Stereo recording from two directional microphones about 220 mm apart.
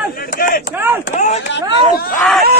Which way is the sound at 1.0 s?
35° left (ahead or behind).